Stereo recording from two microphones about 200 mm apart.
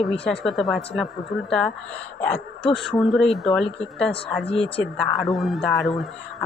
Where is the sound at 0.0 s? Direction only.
Centre (ahead or behind).